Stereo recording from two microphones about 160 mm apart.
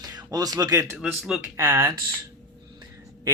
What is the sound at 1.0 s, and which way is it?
Speech, 5° right (ahead or behind).